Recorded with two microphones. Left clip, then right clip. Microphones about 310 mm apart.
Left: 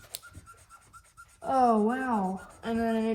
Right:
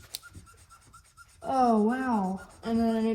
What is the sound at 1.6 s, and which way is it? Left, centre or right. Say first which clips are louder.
Speech: even; left.